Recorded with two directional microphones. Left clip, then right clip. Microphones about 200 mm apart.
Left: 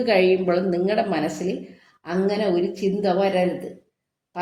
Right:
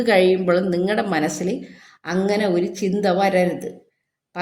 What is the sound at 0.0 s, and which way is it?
A woman's voice, 30° right (ahead or behind).